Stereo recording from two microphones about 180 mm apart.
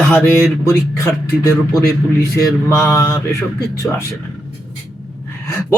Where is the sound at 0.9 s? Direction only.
15° left (ahead or behind).